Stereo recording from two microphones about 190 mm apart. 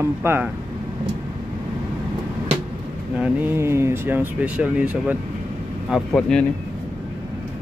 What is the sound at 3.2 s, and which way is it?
Speech, 10° right (ahead or behind).